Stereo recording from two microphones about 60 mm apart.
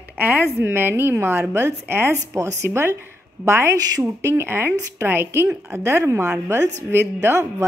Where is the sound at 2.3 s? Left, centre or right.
Right.